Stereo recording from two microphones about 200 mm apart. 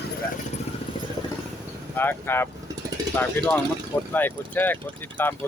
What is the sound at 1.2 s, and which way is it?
Vehicle, 20° left (ahead or behind).